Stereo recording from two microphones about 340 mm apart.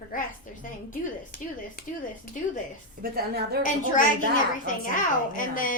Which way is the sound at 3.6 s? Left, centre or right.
Left.